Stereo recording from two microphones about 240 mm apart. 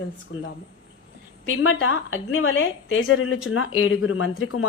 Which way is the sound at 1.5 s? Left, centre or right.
Left.